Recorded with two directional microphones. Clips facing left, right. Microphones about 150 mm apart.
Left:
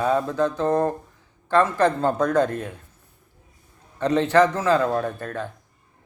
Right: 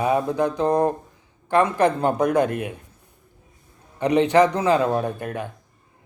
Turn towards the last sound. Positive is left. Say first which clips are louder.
# right 1 dB
turn(degrees=-15)  # may be behind; listen again after turning